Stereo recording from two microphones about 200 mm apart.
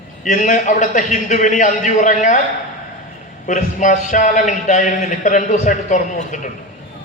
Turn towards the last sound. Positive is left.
turn(degrees=40)  # may be behind; listen again after turning